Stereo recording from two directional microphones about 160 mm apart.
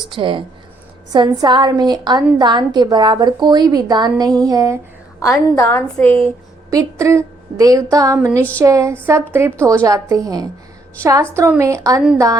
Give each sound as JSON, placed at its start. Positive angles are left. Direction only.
{"t": 0.1, "sound": "a woman's voice", "side_deg": -30}
{"t": 5.5, "sound": "a woman's voice", "side_deg": 15}
{"t": 7.0, "sound": "a woman's voice", "side_deg": -20}